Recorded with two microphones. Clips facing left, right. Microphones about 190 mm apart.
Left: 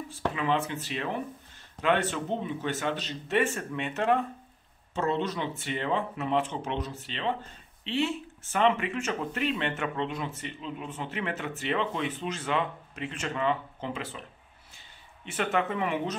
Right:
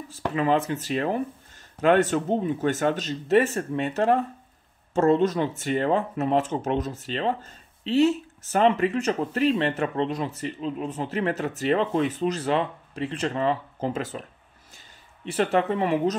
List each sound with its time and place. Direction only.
0.4 s speech: 40° right (ahead or behind)
15.2 s speech: 35° right (ahead or behind)